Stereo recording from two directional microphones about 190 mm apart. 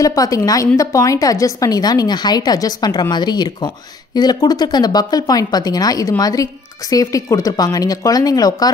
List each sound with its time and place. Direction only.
0.0 s a woman's voice: 20° left (ahead or behind)